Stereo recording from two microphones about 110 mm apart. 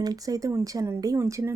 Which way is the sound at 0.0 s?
35° right (ahead or behind).